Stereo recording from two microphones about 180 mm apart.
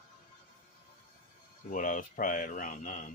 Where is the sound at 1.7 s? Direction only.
45° left (ahead or behind).